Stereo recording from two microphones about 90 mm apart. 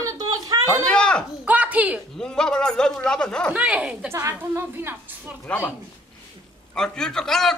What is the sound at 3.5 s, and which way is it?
Speech, 15° right (ahead or behind).